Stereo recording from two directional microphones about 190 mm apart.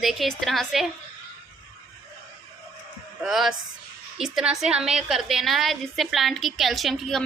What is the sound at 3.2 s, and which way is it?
A woman's voice, centre (ahead or behind).